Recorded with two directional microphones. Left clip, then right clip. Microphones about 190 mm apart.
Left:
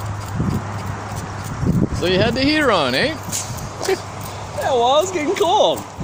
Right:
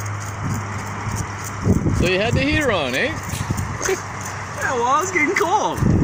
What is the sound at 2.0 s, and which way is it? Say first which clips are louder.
Speech: left 2 dB; 40° left (ahead or behind).